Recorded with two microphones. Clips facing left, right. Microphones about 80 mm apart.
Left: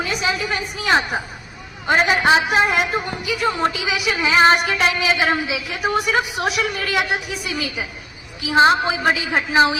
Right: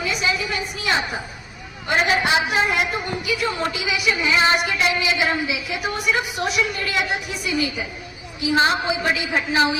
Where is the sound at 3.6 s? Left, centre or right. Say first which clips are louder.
Left 4 dB; left.